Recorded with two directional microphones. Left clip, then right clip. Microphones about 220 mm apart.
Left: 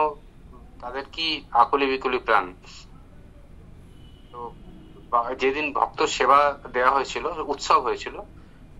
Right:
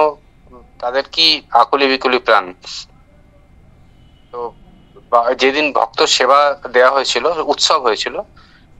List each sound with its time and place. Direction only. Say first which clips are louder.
0.7 s speech: right 15 dB; 55° right (ahead or behind)
5.1 s a man's voice: right 10 dB; 55° right (ahead or behind)